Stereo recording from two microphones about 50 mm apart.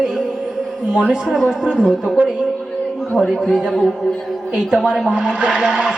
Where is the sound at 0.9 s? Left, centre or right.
Centre.